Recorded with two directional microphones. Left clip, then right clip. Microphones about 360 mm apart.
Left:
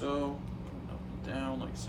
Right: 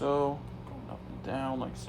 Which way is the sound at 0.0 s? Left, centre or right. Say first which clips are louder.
Right 6 dB; centre.